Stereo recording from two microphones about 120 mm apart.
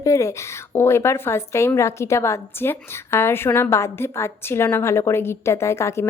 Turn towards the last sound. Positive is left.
turn(degrees=25)  # may be behind; listen again after turning